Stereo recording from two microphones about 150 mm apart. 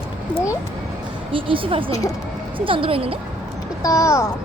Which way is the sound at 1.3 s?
35° right (ahead or behind).